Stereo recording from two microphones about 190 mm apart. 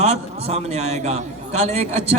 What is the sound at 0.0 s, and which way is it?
A man's voice, 35° right (ahead or behind).